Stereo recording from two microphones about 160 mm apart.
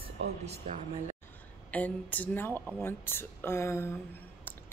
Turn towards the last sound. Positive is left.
turn(degrees=15)  # may be behind; listen again after turning